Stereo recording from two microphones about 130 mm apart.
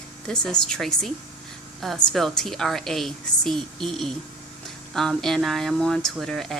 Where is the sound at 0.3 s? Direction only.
5° left (ahead or behind).